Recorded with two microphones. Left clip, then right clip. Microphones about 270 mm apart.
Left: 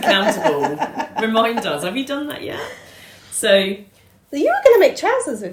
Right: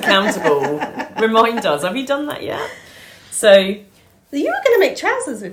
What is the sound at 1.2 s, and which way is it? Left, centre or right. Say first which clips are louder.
Speech: right 4 dB; centre.